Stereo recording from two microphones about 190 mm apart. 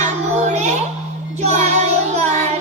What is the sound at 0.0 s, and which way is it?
Music, 35° right (ahead or behind).